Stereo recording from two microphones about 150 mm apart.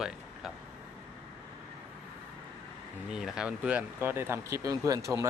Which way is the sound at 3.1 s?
5° right (ahead or behind).